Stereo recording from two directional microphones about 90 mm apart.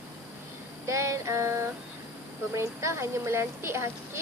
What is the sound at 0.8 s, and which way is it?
A woman's voice, 35° right (ahead or behind).